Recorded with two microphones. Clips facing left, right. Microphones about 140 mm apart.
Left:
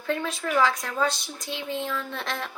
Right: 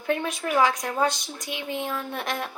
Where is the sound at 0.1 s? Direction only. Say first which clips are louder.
Right 1 dB; 15° right (ahead or behind).